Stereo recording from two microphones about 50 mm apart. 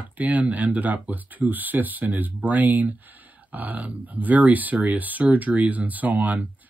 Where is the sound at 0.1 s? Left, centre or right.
Right.